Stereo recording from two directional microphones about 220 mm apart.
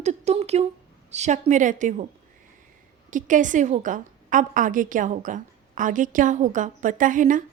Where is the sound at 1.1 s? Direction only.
30° right (ahead or behind).